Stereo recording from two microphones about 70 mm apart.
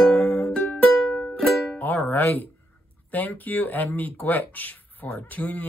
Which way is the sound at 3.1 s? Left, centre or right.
Left.